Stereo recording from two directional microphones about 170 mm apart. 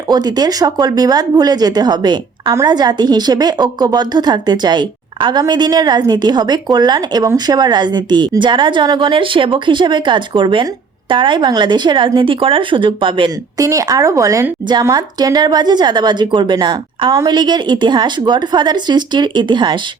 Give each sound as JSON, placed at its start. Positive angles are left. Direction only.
{"t": 0.1, "sound": "speech", "side_deg": -25}